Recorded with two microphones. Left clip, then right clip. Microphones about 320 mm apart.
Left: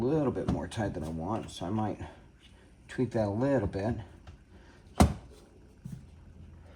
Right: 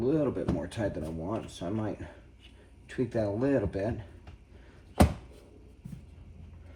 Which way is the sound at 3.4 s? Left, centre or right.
Centre.